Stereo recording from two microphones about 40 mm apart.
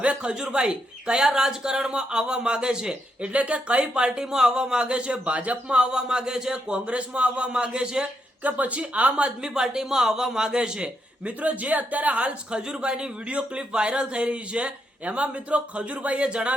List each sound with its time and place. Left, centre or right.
0.2 s speech: right
3.3 s speech: right
5.7 s speech: right
8.4 s speech: right
9.1 s speech: right
11.3 s speech: right